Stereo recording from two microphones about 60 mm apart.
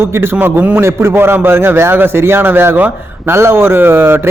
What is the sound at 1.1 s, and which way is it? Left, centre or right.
A man's voice, right.